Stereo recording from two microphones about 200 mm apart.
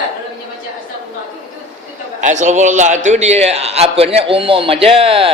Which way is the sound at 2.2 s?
35° right (ahead or behind).